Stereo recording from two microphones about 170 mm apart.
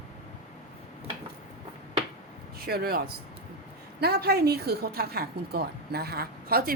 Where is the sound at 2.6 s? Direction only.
65° right (ahead or behind).